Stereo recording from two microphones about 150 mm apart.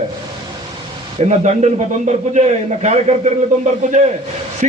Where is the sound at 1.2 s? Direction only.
50° right (ahead or behind).